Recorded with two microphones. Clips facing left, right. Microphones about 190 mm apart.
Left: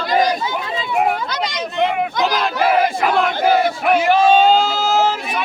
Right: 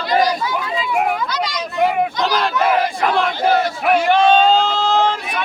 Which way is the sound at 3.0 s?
Centre (ahead or behind).